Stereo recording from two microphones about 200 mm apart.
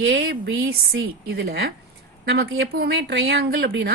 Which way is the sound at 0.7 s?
55° right (ahead or behind).